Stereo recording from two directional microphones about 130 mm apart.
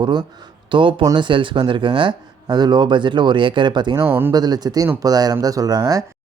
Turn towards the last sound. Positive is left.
turn(degrees=-30)  # may be behind; listen again after turning